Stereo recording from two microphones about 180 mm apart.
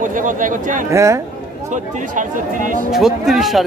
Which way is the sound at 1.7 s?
45° right (ahead or behind).